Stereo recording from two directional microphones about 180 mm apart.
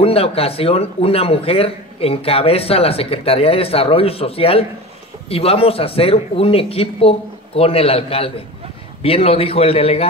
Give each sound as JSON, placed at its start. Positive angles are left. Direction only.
{"t": 0.0, "sound": "speech", "side_deg": 35}